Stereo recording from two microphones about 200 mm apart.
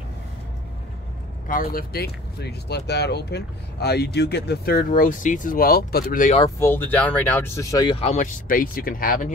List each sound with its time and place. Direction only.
1.5 s speech: 45° left (ahead or behind)
6.6 s speech: 10° left (ahead or behind); by 9.3 s 45° left (ahead or behind)